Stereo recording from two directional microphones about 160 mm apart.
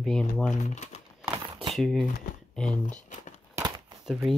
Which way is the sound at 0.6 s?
45° left (ahead or behind).